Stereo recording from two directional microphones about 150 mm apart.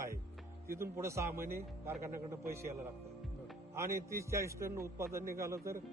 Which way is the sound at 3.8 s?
20° right (ahead or behind).